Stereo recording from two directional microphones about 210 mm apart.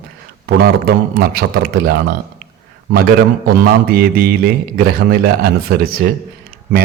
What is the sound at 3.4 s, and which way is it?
A man's voice, 45° right (ahead or behind).